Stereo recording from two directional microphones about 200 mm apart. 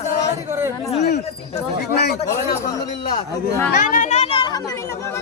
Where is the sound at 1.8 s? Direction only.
50° left (ahead or behind).